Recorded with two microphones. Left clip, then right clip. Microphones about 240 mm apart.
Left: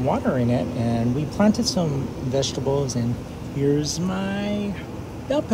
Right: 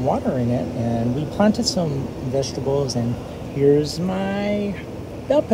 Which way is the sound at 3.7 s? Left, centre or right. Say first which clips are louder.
Right 5 dB; centre.